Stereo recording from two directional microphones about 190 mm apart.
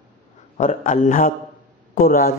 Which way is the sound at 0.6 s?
40° left (ahead or behind).